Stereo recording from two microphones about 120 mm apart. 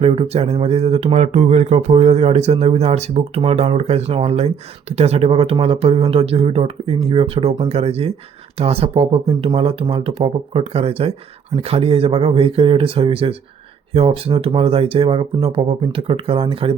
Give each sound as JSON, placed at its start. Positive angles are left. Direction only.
{"t": 0.0, "sound": "speech", "side_deg": -55}